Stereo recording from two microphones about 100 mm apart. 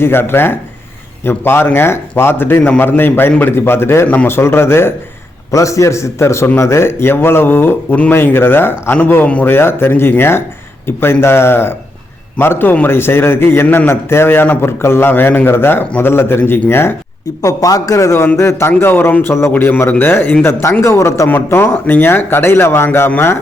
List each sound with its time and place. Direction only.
0.0 s speech: 25° left (ahead or behind)
17.4 s a man's voice: 35° left (ahead or behind)